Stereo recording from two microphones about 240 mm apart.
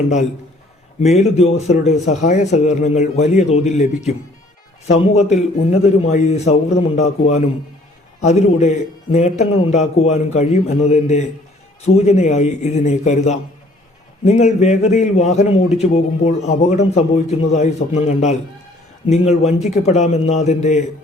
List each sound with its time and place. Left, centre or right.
1.0 s a man's voice: left
5.3 s a man's voice: left